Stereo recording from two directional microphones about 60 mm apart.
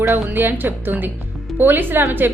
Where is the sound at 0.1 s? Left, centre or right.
Right.